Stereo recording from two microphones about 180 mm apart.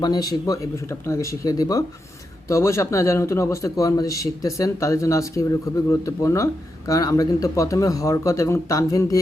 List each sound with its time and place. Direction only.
0.0 s a man's voice: 20° left (ahead or behind)